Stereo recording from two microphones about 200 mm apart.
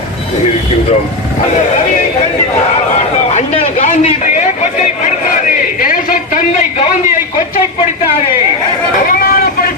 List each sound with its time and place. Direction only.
3.3 s a man's voice: 35° left (ahead or behind)
5.8 s a sound: 45° left (ahead or behind)
9.0 s vehicle: 45° left (ahead or behind)